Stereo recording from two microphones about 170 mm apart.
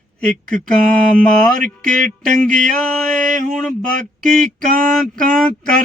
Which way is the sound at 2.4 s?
5° left (ahead or behind).